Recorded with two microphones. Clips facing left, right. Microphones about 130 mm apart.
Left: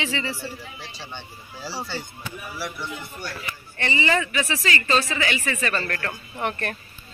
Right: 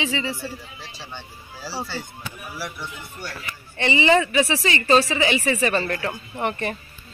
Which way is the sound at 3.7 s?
20° right (ahead or behind).